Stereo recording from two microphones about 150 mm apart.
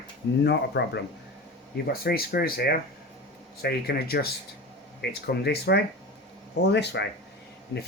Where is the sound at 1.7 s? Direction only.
90° left.